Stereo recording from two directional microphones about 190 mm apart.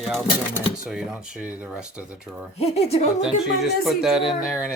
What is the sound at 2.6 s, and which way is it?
Speech, 35° left (ahead or behind).